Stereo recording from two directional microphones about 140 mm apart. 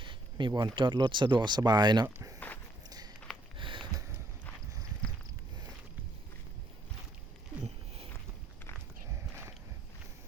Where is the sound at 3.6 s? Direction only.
35° right (ahead or behind).